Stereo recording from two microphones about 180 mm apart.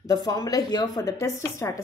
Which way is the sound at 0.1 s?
20° left (ahead or behind).